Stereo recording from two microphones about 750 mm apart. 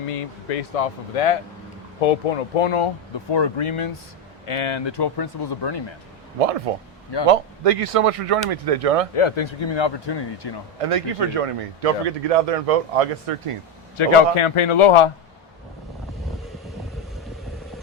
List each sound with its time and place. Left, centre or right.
0.1 s speech: left
6.7 s speech: right
9.1 s speech: left
10.8 s speech: right
13.9 s speech: left